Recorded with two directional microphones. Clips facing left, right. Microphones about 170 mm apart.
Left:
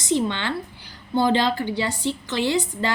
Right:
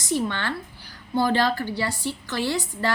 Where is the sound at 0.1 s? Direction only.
20° left (ahead or behind).